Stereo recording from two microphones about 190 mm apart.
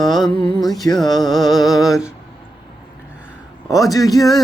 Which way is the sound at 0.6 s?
Centre (ahead or behind).